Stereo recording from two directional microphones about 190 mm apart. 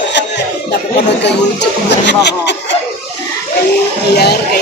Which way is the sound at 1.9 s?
65° left (ahead or behind).